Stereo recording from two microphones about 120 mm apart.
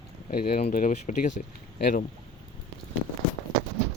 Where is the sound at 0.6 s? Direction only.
70° left (ahead or behind); by 1.4 s 90° left.